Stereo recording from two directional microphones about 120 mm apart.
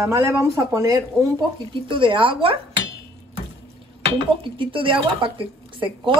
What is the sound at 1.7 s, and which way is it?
Speech, 45° right (ahead or behind).